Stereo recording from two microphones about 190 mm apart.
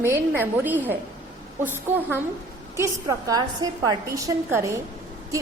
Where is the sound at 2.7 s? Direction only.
15° right (ahead or behind).